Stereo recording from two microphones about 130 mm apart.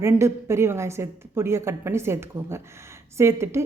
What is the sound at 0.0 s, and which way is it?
A woman's voice, 20° right (ahead or behind).